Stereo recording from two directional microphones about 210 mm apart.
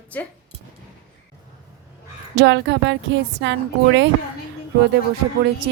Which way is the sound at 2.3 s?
55° right (ahead or behind).